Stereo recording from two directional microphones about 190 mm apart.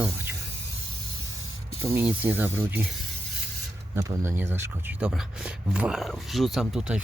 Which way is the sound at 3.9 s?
15° right (ahead or behind).